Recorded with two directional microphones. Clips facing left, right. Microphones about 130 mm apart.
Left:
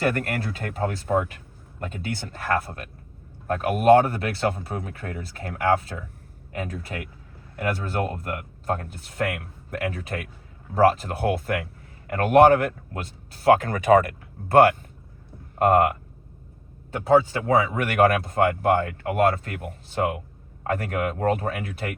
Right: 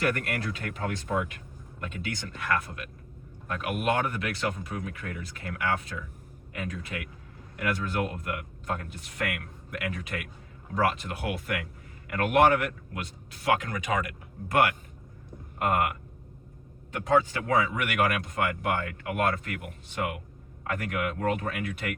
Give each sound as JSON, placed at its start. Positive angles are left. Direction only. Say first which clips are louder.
{"t": 0.0, "sound": "speech", "louder": "left 4 dB", "side_deg": 35}
{"t": 17.0, "sound": "speech", "louder": "left 6 dB", "side_deg": 35}